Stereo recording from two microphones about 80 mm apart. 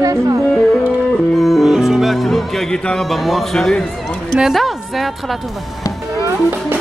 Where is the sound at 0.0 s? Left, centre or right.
Right.